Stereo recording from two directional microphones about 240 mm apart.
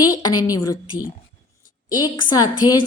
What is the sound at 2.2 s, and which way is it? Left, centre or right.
Speech, centre.